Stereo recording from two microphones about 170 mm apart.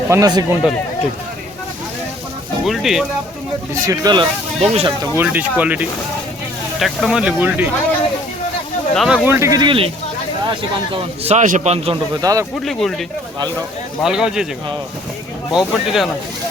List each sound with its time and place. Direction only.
0.1 s speech: 20° right (ahead or behind)
2.6 s speech: centre (ahead or behind)
3.8 s speech: 20° right (ahead or behind)
4.6 s a man's voice: 40° right (ahead or behind)
5.1 s speech: 10° right (ahead or behind)
9.0 s speech: centre (ahead or behind)
9.2 s a man's voice: 15° right (ahead or behind); by 11.9 s 40° right (ahead or behind)
12.2 s speech: 20° right (ahead or behind)
12.6 s speech: centre (ahead or behind)
15.5 s speech: centre (ahead or behind)